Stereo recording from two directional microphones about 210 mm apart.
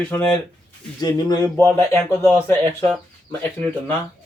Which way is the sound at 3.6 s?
30° right (ahead or behind).